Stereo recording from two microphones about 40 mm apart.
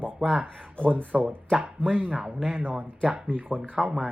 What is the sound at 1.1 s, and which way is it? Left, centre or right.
Speech, centre.